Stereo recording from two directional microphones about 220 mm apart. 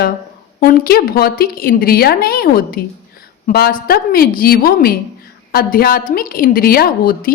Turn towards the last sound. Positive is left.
turn(degrees=40)  # may be behind; listen again after turning